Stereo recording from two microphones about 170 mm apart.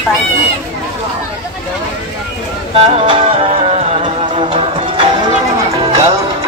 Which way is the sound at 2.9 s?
35° right (ahead or behind).